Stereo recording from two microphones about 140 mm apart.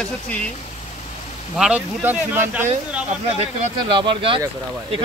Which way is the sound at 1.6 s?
10° right (ahead or behind).